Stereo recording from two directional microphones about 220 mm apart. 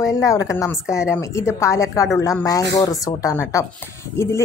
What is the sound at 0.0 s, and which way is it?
A woman's voice, 15° left (ahead or behind).